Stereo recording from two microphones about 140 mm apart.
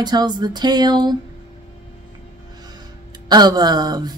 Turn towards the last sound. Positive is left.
turn(degrees=-30)  # may be behind; listen again after turning